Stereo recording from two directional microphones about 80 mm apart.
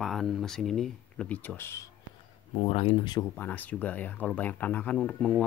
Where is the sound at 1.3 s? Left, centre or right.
Left.